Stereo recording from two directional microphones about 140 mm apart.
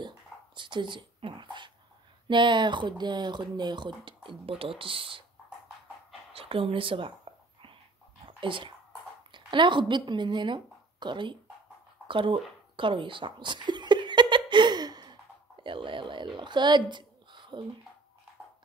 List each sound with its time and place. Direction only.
0.6 s speech: 35° right (ahead or behind)
6.3 s speech: 40° right (ahead or behind)
8.4 s speech: 35° right (ahead or behind)
12.1 s chuckle: 35° right (ahead or behind)
16.3 s speech: 35° right (ahead or behind)
16.9 s a sound: 35° right (ahead or behind)